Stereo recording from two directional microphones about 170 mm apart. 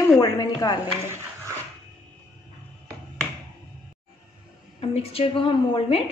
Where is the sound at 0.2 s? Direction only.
20° left (ahead or behind).